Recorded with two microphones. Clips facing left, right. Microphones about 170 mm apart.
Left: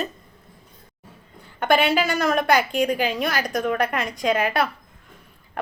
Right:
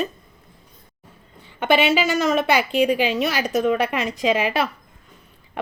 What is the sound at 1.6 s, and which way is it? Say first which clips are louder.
A woman's voice: right 1 dB; 5° right (ahead or behind).